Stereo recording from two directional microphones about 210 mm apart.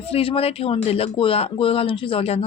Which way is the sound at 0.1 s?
25° left (ahead or behind).